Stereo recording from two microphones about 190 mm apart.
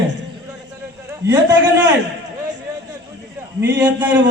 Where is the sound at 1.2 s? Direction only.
15° right (ahead or behind).